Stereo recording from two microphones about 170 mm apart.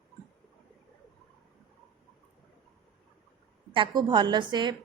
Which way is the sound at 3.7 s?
30° right (ahead or behind).